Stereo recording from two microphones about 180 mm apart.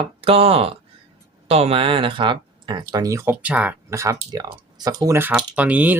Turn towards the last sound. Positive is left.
turn(degrees=-10)  # may be behind; listen again after turning